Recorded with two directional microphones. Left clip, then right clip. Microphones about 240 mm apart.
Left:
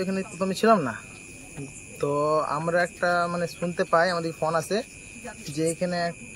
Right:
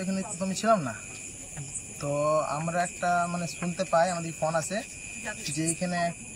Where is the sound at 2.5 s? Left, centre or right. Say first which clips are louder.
Left 5 dB; left.